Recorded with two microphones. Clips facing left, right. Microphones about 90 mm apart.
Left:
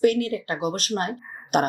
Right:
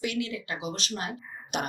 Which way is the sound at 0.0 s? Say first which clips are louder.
Left 11 dB; 45° left (ahead or behind).